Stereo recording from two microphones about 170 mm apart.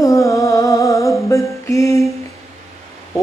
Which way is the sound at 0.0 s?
20° left (ahead or behind).